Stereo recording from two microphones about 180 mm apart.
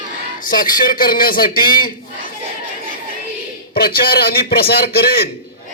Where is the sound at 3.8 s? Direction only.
60° left (ahead or behind).